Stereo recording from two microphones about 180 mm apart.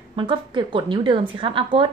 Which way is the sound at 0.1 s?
25° right (ahead or behind).